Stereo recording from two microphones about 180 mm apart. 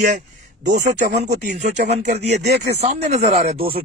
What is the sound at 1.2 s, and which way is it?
Speech, 60° right (ahead or behind).